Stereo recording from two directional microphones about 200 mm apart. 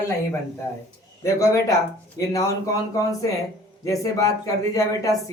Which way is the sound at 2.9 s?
15° left (ahead or behind).